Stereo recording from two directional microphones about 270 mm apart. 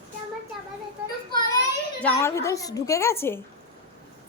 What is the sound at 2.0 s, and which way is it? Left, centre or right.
A child's voice, centre.